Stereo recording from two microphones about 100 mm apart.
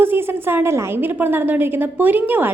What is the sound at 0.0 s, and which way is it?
A woman's voice, 20° right (ahead or behind).